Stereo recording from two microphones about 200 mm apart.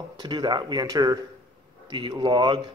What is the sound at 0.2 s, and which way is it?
Speech, 20° right (ahead or behind).